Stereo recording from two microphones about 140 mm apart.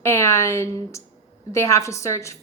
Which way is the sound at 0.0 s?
20° left (ahead or behind).